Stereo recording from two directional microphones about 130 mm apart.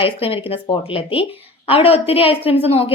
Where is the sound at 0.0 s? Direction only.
45° left (ahead or behind).